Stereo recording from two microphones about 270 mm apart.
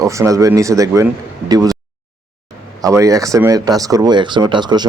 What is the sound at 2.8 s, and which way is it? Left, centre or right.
Speech, centre.